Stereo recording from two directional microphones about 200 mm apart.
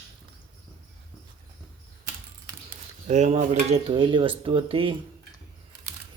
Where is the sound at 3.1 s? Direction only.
35° right (ahead or behind).